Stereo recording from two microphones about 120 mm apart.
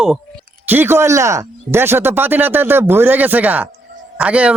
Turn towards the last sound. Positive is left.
turn(degrees=-10)  # may be behind; listen again after turning